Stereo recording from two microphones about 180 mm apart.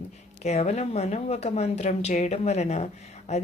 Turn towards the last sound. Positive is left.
turn(degrees=40)  # may be behind; listen again after turning